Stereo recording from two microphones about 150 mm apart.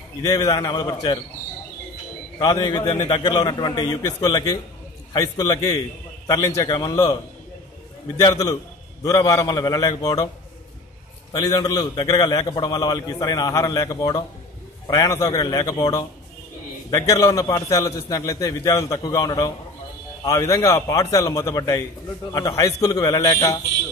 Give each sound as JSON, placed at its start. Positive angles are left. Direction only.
{"t": 0.2, "sound": "a man's voice", "side_deg": 25}
{"t": 2.3, "sound": "a man's voice", "side_deg": 25}
{"t": 8.2, "sound": "a man's voice", "side_deg": 25}
{"t": 11.3, "sound": "a man's voice", "side_deg": 25}